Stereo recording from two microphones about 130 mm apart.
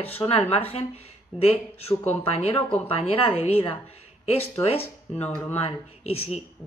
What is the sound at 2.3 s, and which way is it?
A woman's voice, 50° left (ahead or behind).